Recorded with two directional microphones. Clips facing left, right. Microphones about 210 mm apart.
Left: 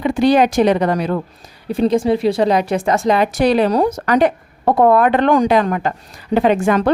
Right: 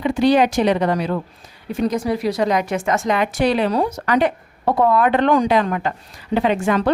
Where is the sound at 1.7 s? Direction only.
30° left (ahead or behind).